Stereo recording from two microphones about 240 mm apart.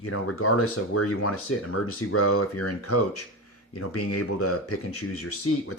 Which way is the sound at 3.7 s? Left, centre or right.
Left.